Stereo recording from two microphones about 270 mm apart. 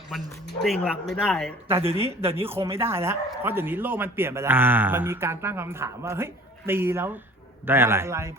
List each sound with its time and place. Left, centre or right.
0.6 s speech: centre
1.6 s a man's voice: centre
1.9 s speech: right
2.7 s a man's voice: centre